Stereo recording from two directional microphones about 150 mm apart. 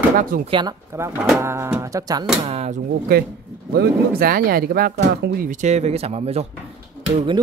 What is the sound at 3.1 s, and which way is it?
Speech, 85° right.